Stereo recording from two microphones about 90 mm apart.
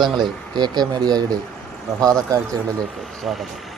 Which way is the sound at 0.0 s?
55° right (ahead or behind).